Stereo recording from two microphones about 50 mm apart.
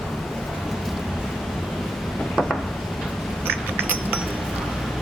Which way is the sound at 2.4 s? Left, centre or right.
Centre.